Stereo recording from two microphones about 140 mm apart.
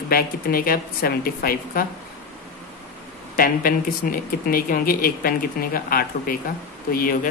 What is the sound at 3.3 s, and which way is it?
Speech, 90° left.